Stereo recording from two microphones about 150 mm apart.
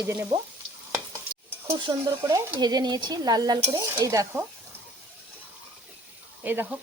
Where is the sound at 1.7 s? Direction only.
35° right (ahead or behind).